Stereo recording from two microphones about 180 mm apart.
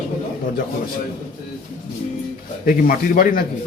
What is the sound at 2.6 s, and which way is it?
Speech, 50° left (ahead or behind).